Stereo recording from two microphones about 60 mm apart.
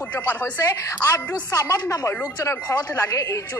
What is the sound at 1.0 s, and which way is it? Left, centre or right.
Speech, left.